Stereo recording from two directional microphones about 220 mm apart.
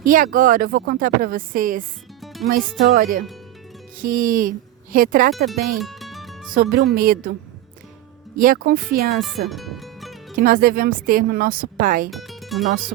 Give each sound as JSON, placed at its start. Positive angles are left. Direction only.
{"t": 0.0, "sound": "speech", "side_deg": -40}
{"t": 2.2, "sound": "music", "side_deg": 0}
{"t": 2.9, "sound": "speech", "side_deg": -40}
{"t": 5.5, "sound": "music", "side_deg": 0}
{"t": 6.5, "sound": "speech", "side_deg": -40}
{"t": 8.4, "sound": "speech", "side_deg": -40}
{"t": 9.5, "sound": "music", "side_deg": 0}
{"t": 10.3, "sound": "speech", "side_deg": -40}
{"t": 12.1, "sound": "music", "side_deg": 0}